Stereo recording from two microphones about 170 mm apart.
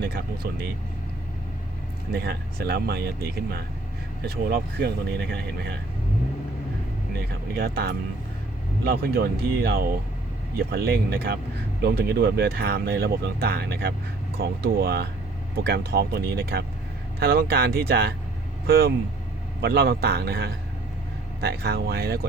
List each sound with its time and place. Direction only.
2.1 s speech: 70° right (ahead or behind)
4.3 s speech: 70° right (ahead or behind)
7.5 s speech: 65° right (ahead or behind)